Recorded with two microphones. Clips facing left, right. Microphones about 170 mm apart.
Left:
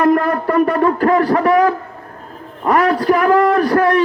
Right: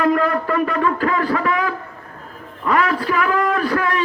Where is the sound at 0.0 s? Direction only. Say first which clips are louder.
Left 4 dB; 45° left (ahead or behind).